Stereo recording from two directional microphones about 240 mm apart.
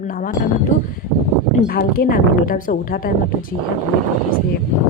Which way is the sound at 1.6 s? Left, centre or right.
Left.